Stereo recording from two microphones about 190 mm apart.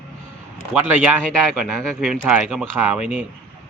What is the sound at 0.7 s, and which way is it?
A man's voice, 5° right (ahead or behind).